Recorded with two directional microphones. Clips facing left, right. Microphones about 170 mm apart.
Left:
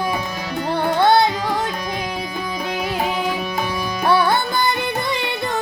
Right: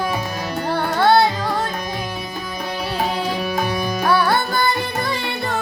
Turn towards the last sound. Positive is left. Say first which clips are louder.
# even
turn(degrees=20)  # may be behind; listen again after turning